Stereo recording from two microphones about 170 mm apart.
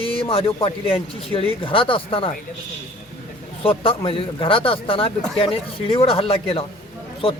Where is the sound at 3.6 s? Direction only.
35° left (ahead or behind).